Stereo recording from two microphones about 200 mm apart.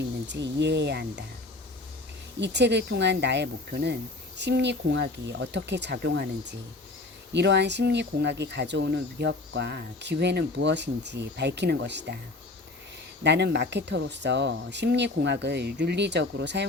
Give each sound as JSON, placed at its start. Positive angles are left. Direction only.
{"t": 0.3, "sound": "speech", "side_deg": -60}
{"t": 2.4, "sound": "speech", "side_deg": -60}
{"t": 13.2, "sound": "speech", "side_deg": -60}